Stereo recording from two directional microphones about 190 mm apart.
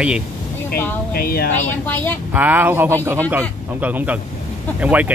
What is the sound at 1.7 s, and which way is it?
Speech, 10° left (ahead or behind).